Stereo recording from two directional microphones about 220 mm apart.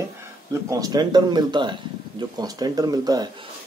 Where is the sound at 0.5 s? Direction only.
15° right (ahead or behind).